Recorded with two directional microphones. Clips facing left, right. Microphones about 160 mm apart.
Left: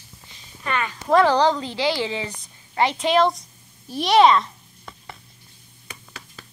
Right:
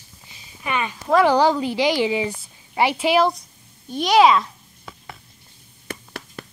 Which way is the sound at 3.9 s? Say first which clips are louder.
Even; centre (ahead or behind).